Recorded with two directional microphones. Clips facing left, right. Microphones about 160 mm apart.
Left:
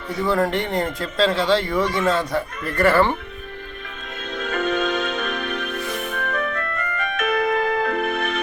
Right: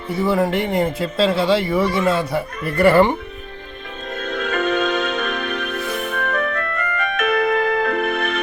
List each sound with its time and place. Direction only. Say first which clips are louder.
0.1 s speech: right 2 dB; 5° right (ahead or behind)
4.2 s music: right 3 dB; 60° right (ahead or behind)